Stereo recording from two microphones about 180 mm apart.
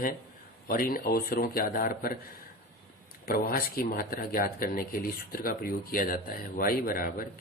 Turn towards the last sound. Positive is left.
turn(degrees=55)  # may be behind; listen again after turning